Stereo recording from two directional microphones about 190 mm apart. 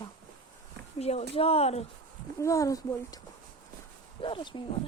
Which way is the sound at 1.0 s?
35° left (ahead or behind).